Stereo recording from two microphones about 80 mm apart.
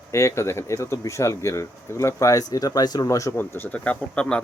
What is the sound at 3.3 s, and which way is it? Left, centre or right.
Speech, left.